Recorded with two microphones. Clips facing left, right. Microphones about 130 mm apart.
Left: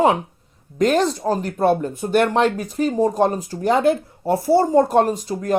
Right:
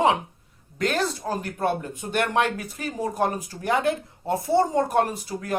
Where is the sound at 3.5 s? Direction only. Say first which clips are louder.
Left 6 dB; 20° left (ahead or behind).